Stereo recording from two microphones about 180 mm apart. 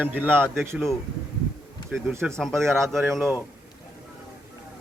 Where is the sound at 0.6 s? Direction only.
10° right (ahead or behind).